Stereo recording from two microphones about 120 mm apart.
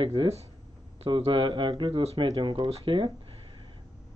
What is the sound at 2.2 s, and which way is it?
Speech, 40° right (ahead or behind).